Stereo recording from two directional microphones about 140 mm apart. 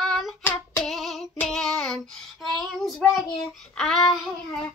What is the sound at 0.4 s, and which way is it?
Child singing, 15° left (ahead or behind).